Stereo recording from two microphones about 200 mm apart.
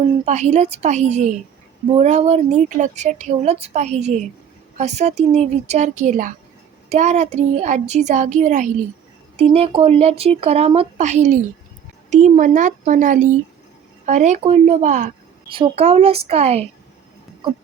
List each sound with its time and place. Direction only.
0.3 s speech: 35° right (ahead or behind)
15.4 s speech: 25° right (ahead or behind)